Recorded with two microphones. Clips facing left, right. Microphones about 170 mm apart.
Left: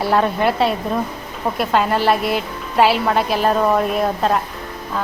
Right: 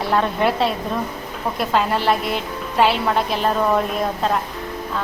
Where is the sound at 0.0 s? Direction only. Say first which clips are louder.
Left 2 dB; 5° left (ahead or behind).